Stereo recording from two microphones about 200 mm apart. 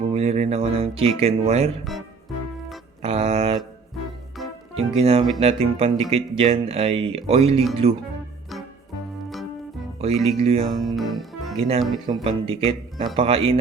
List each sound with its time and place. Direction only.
0.1 s speech: 30° right (ahead or behind)
1.8 s speech: centre (ahead or behind)
3.0 s mantra: 30° right (ahead or behind)
4.8 s speech: 30° right (ahead or behind)
10.0 s speech: 30° right (ahead or behind)
10.7 s speech: centre (ahead or behind)
12.0 s speech: 25° right (ahead or behind)